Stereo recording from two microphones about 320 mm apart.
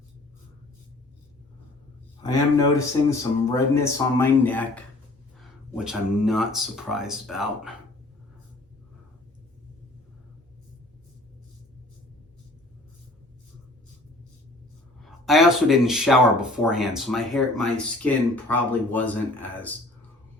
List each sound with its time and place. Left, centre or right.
2.2 s speech: centre
15.0 s speech: centre